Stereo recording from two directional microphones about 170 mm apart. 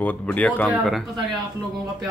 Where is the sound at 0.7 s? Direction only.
5° right (ahead or behind).